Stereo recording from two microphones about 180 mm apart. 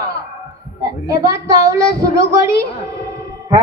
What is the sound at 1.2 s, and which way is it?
Child singing, 20° right (ahead or behind).